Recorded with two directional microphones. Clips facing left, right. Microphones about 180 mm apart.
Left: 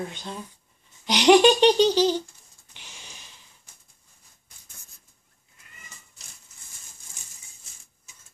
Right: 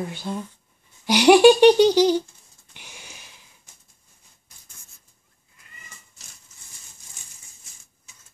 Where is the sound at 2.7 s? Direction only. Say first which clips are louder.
Right 3 dB; 10° right (ahead or behind).